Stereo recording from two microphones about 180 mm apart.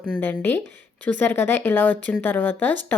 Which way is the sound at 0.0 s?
10° left (ahead or behind).